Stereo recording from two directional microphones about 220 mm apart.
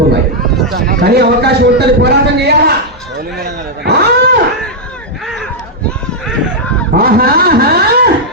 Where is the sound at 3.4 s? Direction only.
50° right (ahead or behind).